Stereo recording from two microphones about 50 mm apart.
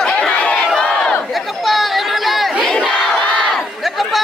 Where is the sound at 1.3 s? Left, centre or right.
Centre.